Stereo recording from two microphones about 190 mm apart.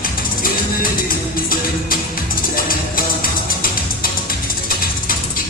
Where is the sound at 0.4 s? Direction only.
50° left (ahead or behind).